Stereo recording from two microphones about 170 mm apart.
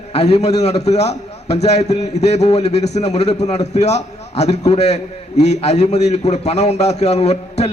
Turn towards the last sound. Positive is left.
turn(degrees=40)  # may be behind; listen again after turning